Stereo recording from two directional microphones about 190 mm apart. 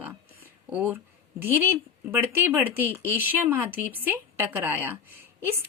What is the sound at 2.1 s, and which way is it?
A woman's voice, 10° right (ahead or behind).